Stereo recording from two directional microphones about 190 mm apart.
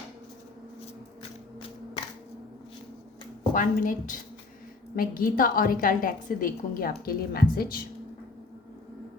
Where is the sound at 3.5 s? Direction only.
45° left (ahead or behind).